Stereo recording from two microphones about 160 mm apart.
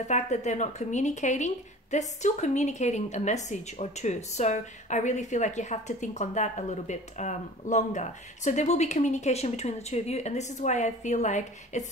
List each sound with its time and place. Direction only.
0.0 s speech: 45° left (ahead or behind)